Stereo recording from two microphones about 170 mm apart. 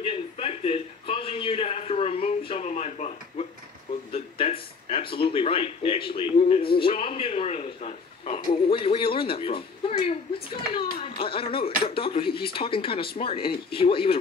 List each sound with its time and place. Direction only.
0.4 s a man's voice: 35° left (ahead or behind)